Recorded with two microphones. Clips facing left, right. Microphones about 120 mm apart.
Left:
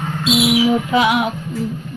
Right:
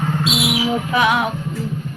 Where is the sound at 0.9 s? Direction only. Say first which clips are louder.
Even; 20° left (ahead or behind).